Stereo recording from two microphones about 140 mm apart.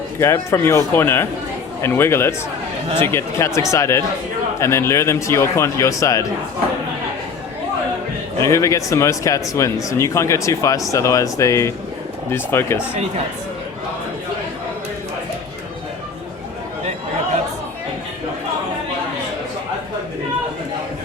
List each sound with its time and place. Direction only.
0.2 s speech: 20° left (ahead or behind)
8.4 s speech: 20° left (ahead or behind)